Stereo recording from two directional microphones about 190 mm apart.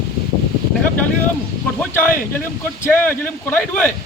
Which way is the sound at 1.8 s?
10° left (ahead or behind).